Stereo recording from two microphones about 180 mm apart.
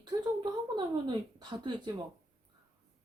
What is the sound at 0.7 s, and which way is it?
Speech, 25° right (ahead or behind).